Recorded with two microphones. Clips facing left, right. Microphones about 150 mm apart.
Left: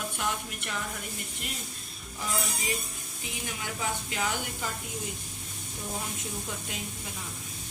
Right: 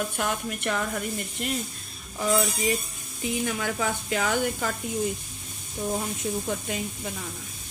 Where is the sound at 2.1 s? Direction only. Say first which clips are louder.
Right 10 dB; 60° right (ahead or behind).